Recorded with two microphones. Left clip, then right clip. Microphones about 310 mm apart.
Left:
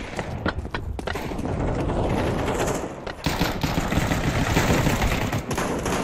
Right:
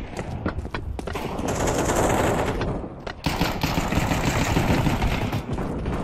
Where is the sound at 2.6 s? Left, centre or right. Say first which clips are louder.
Left 4 dB; left.